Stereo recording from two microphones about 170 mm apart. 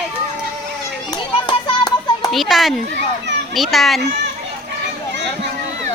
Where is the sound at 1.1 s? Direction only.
25° left (ahead or behind).